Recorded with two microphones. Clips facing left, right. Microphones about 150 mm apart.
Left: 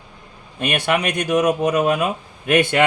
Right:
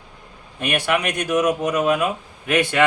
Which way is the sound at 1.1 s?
20° left (ahead or behind).